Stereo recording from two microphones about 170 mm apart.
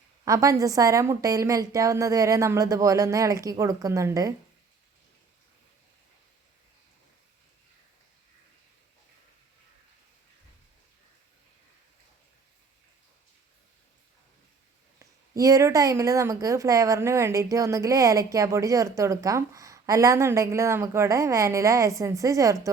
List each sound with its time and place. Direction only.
0.3 s a woman's voice: 20° right (ahead or behind)
14.9 s a woman's voice: 20° right (ahead or behind)